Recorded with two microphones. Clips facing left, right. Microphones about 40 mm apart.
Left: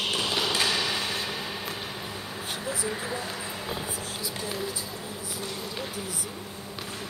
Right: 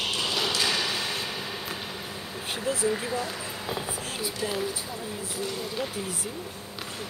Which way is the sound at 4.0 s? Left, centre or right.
Right.